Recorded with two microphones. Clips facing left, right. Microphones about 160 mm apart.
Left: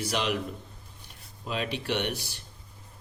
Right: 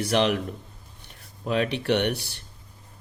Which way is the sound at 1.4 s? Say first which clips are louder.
Right 7 dB; 60° right (ahead or behind).